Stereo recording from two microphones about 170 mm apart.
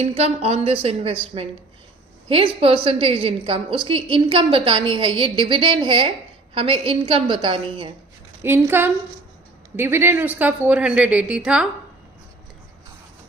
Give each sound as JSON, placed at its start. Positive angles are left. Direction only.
{"t": 0.0, "sound": "a woman's voice", "side_deg": -40}
{"t": 8.4, "sound": "speech", "side_deg": -15}